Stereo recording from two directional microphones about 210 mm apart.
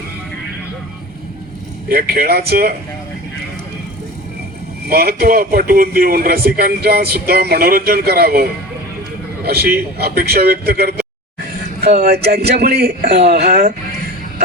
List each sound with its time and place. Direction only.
1.9 s a man's voice: 45° right (ahead or behind)
4.9 s a man's voice: 45° right (ahead or behind)